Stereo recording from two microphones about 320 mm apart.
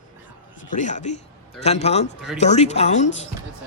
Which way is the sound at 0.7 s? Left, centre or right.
Left.